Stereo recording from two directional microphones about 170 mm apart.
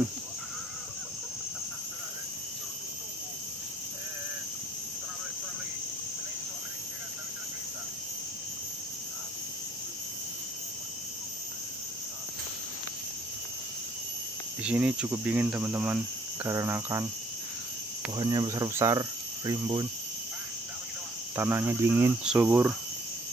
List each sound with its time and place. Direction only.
14.6 s cricket: 5° right (ahead or behind)
18.1 s cricket: 25° right (ahead or behind)
21.4 s cricket: 10° right (ahead or behind)